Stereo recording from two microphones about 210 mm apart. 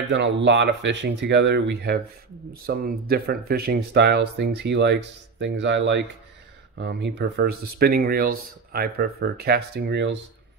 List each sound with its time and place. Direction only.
0.1 s speech: 55° right (ahead or behind)